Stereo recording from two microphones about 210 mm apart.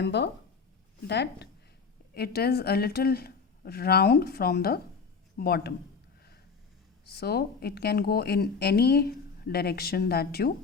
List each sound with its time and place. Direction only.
0.0 s a woman's voice: 55° left (ahead or behind)
7.0 s a woman's voice: 50° left (ahead or behind)